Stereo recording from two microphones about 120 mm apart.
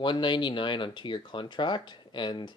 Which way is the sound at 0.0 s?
40° left (ahead or behind).